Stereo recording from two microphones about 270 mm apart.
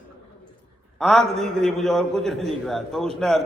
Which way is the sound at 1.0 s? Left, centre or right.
Centre.